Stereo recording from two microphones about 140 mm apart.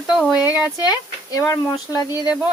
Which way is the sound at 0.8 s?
25° left (ahead or behind).